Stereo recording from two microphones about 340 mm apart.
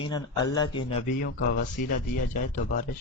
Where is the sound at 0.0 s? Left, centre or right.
Centre.